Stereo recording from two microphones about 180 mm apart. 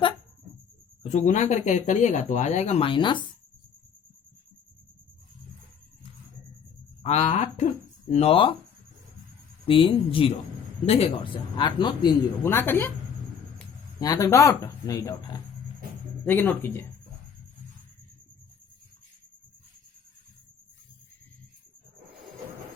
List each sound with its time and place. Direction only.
1.1 s speech: 40° left (ahead or behind); by 3.2 s 25° left (ahead or behind)
7.0 s a sound: 35° left (ahead or behind)
8.1 s speech: 35° left (ahead or behind)
9.6 s speech: 30° left (ahead or behind); by 12.9 s 10° left (ahead or behind)
14.0 s speech: 20° left (ahead or behind)